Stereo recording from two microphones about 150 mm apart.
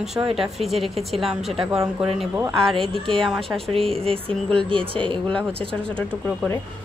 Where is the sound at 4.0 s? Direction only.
40° right (ahead or behind).